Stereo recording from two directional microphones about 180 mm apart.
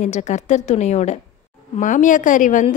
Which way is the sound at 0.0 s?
40° left (ahead or behind).